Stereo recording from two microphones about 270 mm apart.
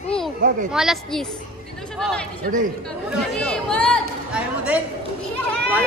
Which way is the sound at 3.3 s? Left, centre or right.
Centre.